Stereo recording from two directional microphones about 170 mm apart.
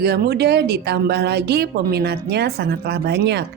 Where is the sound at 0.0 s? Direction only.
70° right (ahead or behind).